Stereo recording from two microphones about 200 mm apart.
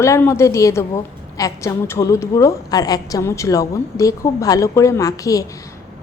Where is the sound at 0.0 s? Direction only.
15° left (ahead or behind).